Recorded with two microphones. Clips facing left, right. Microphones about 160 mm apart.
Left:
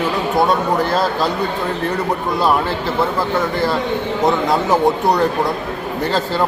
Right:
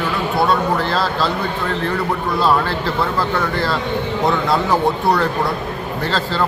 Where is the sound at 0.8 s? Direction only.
20° left (ahead or behind).